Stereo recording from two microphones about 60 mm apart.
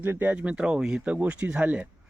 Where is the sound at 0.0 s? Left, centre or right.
Right.